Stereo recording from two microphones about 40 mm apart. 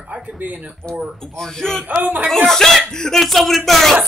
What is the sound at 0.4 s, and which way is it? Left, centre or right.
Speech, right.